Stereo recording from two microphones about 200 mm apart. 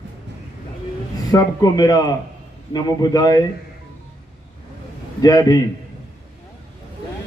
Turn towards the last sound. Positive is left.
turn(degrees=20)  # may be behind; listen again after turning